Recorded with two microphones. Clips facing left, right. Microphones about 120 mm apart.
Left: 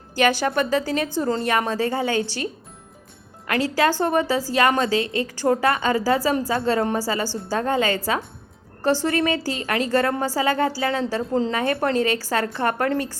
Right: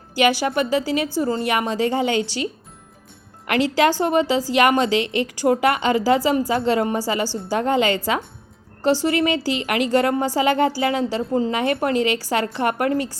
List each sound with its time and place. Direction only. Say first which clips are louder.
0.1 s a woman's voice: right 1 dB; 10° right (ahead or behind)